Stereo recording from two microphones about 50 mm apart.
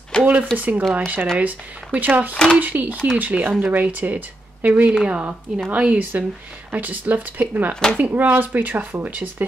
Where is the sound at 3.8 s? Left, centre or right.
Right.